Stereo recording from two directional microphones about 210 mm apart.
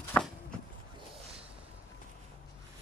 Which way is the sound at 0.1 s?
10° left (ahead or behind).